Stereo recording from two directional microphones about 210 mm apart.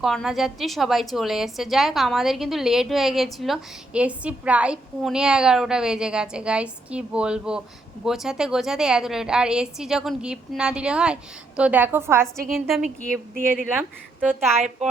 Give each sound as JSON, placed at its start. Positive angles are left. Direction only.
{"t": 0.0, "sound": "a woman's voice", "side_deg": 0}
{"t": 12.5, "sound": "a woman's voice", "side_deg": 0}
{"t": 13.0, "sound": "speech", "side_deg": -40}